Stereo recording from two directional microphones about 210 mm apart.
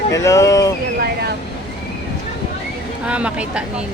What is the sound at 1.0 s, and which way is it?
Speech, 45° right (ahead or behind).